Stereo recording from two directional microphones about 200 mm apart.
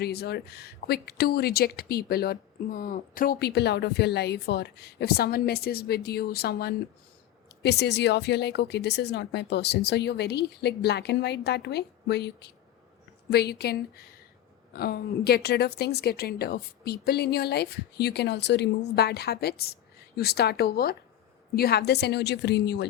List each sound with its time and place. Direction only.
0.0 s speech: 55° left (ahead or behind)